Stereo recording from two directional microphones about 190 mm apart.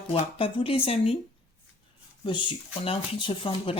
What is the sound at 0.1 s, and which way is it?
Speech, 30° left (ahead or behind).